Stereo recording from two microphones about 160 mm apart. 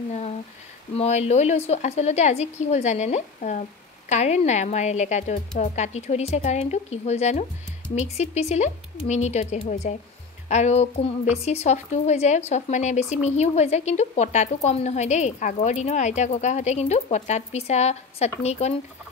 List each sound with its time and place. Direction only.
0.9 s a woman's voice: 40° left (ahead or behind)